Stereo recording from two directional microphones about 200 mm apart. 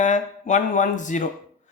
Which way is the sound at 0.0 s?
40° left (ahead or behind).